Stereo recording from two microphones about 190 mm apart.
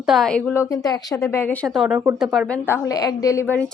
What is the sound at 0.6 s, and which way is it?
Speech, 20° left (ahead or behind).